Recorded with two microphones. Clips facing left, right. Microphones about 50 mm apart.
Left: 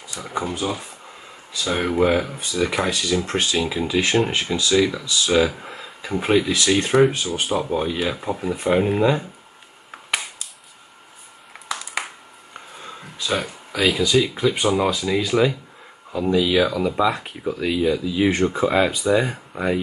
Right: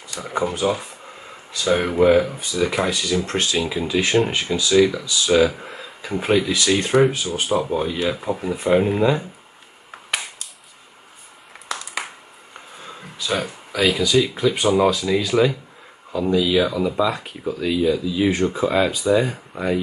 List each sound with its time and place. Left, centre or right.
0.1 s speech: centre
1.6 s speech: centre
5.6 s a sound: centre
6.6 s speech: centre
9.8 s finger snapping: centre
12.5 s speech: centre
18.3 s speech: centre